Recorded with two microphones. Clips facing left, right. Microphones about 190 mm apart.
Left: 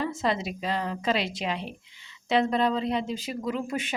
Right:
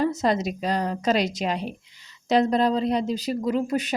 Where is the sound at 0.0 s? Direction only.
40° right (ahead or behind).